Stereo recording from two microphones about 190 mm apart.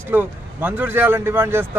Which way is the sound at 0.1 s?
10° right (ahead or behind).